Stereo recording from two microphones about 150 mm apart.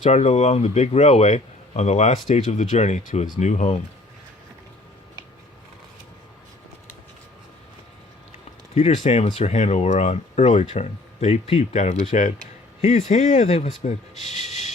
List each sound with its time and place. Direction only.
0.0 s speech: 50° left (ahead or behind)
8.7 s speech: 50° left (ahead or behind)